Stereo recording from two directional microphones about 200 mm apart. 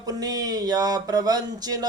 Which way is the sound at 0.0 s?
20° right (ahead or behind).